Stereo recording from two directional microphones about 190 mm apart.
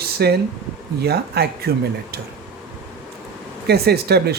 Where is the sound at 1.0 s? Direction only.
55° right (ahead or behind).